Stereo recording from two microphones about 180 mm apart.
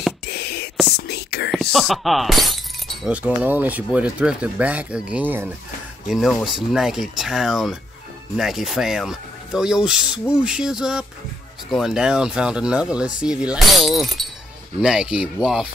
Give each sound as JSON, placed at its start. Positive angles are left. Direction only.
{"t": 0.3, "sound": "whispering", "side_deg": 65}
{"t": 1.5, "sound": "speech", "side_deg": 0}